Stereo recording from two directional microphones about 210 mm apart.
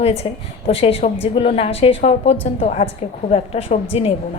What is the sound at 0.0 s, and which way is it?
A woman's voice, 30° left (ahead or behind).